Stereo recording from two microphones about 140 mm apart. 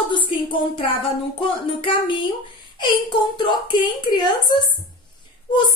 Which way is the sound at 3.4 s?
35° left (ahead or behind).